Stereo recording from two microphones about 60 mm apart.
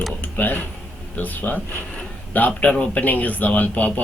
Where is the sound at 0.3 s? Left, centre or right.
Left.